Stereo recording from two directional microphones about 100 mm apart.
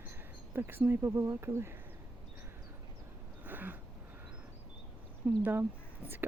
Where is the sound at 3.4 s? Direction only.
20° right (ahead or behind).